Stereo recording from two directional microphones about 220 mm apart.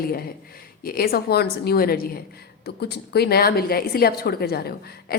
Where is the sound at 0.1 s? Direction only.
45° left (ahead or behind).